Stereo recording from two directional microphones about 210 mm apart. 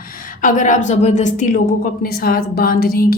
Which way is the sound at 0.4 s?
35° left (ahead or behind).